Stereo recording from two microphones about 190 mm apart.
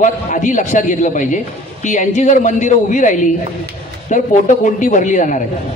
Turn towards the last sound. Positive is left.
turn(degrees=40)  # may be behind; listen again after turning